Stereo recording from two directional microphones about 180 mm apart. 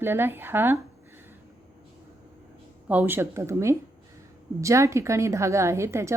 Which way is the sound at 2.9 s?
10° right (ahead or behind).